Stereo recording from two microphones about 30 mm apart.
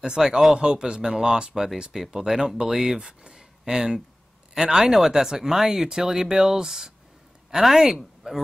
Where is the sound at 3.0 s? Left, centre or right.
Right.